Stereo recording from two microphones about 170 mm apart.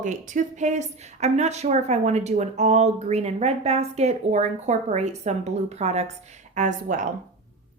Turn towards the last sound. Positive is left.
turn(degrees=-50)  # may be behind; listen again after turning